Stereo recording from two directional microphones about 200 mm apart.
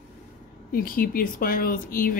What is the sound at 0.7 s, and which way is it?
Speech, 45° left (ahead or behind).